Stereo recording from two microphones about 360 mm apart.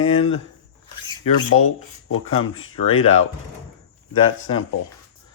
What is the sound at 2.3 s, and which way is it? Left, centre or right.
Speech, left.